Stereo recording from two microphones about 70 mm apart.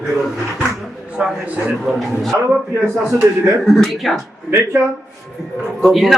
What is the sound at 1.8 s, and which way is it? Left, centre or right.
Speech, centre.